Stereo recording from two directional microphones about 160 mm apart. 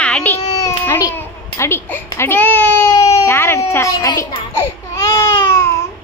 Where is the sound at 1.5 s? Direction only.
15° left (ahead or behind).